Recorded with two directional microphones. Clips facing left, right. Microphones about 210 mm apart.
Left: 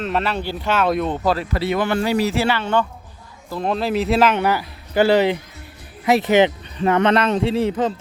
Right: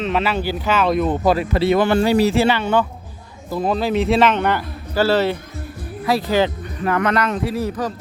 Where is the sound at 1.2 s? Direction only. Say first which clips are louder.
Right 4 dB; 15° right (ahead or behind).